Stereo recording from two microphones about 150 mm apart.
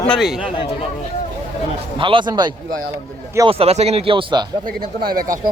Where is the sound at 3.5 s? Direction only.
40° right (ahead or behind).